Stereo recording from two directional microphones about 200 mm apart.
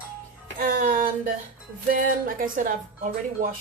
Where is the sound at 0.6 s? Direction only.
40° right (ahead or behind).